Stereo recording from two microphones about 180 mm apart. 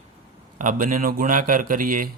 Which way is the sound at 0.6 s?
45° right (ahead or behind).